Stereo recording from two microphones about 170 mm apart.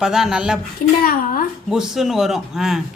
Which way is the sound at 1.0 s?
55° left (ahead or behind).